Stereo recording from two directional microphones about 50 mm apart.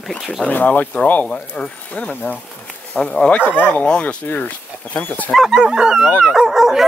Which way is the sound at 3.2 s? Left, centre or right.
Left.